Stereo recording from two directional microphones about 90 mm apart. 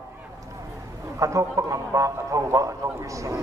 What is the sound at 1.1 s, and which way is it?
A man's voice, 35° right (ahead or behind).